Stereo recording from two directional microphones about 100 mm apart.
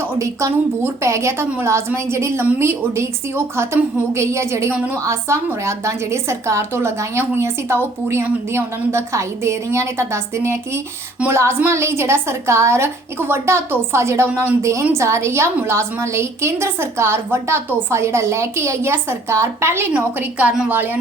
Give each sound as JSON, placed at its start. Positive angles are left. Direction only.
{"t": 0.2, "sound": "a woman's voice", "side_deg": -30}